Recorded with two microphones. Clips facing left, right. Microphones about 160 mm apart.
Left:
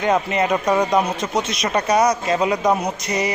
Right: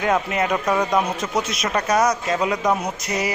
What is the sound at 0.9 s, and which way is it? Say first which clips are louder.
Speech: left 2 dB; 5° right (ahead or behind).